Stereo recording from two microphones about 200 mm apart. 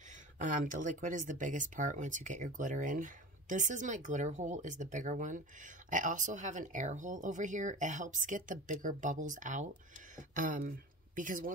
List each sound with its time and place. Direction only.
0.4 s speech: 40° right (ahead or behind)